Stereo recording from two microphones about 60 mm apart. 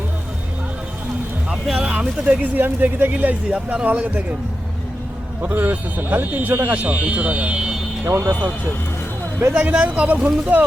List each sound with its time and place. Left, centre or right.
1.5 s speech: centre
5.4 s speech: right; by 7.8 s centre
8.0 s speech: right
9.5 s speech: centre